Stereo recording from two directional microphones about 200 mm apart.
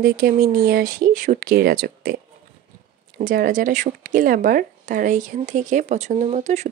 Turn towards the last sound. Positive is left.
turn(degrees=-35)  # may be behind; listen again after turning